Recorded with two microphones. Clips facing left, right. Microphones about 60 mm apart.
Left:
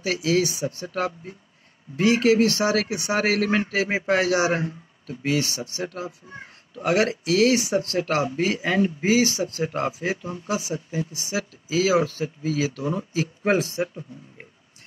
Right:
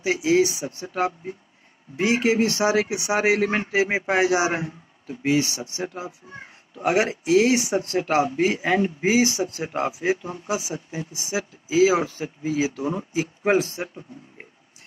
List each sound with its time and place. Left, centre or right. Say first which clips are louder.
0.0 s a man's voice: right 3 dB; right
13.4 s speech: right 2 dB; centre